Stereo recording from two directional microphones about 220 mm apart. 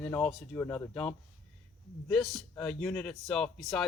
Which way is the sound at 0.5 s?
10° left (ahead or behind).